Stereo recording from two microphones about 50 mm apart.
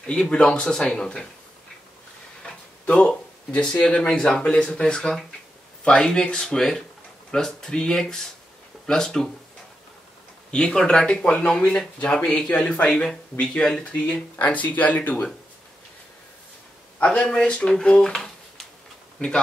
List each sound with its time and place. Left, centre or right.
0.0 s speech: centre
2.4 s a sound: centre
3.8 s speech: centre
10.5 s speech: centre; by 15.2 s left
17.0 s speech: centre